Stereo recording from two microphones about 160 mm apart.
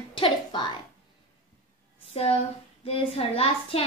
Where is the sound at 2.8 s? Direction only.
35° left (ahead or behind).